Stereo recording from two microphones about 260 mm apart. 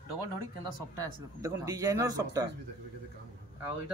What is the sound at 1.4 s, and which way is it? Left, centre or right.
Speech, centre.